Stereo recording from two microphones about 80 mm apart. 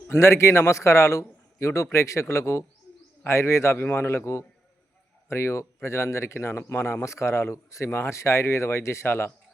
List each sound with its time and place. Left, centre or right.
0.1 s a man's voice: left